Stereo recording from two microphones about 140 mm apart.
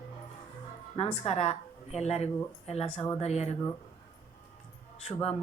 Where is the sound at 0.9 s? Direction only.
50° left (ahead or behind).